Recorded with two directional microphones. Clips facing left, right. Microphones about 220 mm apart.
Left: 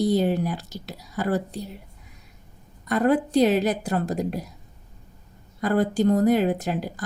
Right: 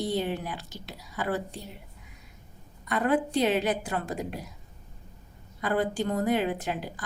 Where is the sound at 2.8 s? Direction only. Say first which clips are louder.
Left 5 dB; 40° left (ahead or behind).